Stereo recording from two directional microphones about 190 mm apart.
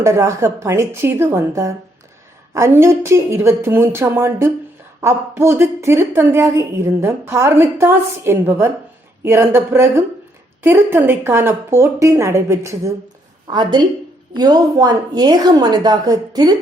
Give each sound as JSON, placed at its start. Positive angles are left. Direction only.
{"t": 0.0, "sound": "a woman's voice", "side_deg": -15}